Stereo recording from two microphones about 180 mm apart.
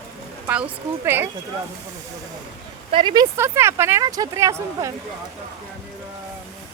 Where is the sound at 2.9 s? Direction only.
25° right (ahead or behind).